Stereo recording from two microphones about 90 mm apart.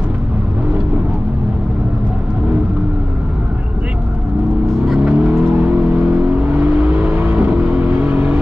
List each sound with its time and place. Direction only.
4.8 s vehicle: 5° right (ahead or behind)
5.2 s vehicle: 15° right (ahead or behind)